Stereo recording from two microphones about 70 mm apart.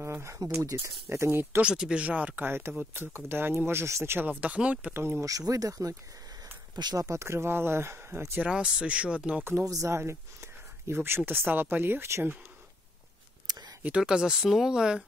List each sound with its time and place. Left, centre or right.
0.0 s speech: right
1.6 s speech: centre; by 4.3 s right
4.3 s speech: centre
4.9 s speech: right
5.2 s speech: right
6.7 s speech: right
7.0 s speech: right
8.5 s speech: centre
9.4 s speech: right
9.7 s speech: right
13.8 s speech: centre